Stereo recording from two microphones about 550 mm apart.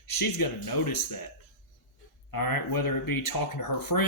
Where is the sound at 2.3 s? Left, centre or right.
Left.